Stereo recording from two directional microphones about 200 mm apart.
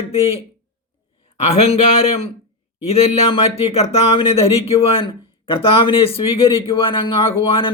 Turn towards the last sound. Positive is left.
turn(degrees=25)  # may be behind; listen again after turning